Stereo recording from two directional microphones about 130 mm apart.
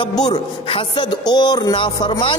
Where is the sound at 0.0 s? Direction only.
35° left (ahead or behind).